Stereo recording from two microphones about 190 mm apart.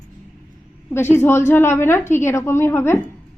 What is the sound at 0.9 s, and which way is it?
A woman's voice, 10° left (ahead or behind).